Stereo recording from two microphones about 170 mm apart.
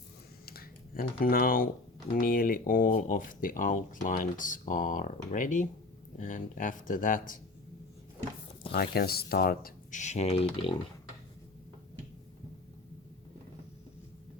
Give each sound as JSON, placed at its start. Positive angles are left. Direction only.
{"t": 0.4, "sound": "computer keyboard", "side_deg": 60}
{"t": 2.1, "sound": "speech", "side_deg": 55}
{"t": 8.7, "sound": "speech", "side_deg": 65}